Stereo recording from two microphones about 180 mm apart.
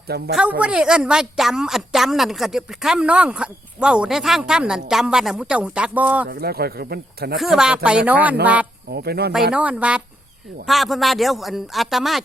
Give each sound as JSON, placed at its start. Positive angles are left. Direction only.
{"t": 0.3, "sound": "a woman's voice", "side_deg": -5}
{"t": 6.2, "sound": "speech", "side_deg": -60}
{"t": 7.3, "sound": "a woman's voice", "side_deg": 0}
{"t": 8.9, "sound": "speech", "side_deg": -60}
{"t": 9.5, "sound": "a woman's voice", "side_deg": -5}